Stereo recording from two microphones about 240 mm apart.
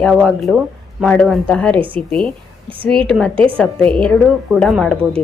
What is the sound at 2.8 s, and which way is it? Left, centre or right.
Speech, right.